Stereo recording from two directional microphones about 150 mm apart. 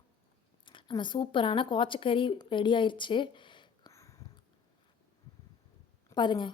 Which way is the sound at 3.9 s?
20° left (ahead or behind).